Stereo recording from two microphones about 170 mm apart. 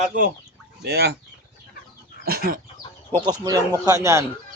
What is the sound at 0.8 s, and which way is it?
Speech, 75° right (ahead or behind).